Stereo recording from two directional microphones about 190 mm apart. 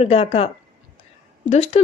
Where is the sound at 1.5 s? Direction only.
35° left (ahead or behind).